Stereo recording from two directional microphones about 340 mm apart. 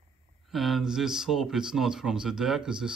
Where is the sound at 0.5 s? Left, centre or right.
Centre.